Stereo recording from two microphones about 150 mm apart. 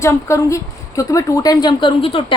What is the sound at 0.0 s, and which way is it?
A woman's voice, 20° left (ahead or behind).